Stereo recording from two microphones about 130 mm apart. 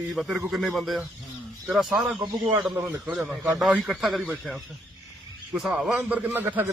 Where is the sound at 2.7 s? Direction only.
15° right (ahead or behind).